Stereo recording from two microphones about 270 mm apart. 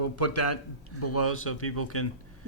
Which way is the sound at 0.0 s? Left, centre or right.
Left.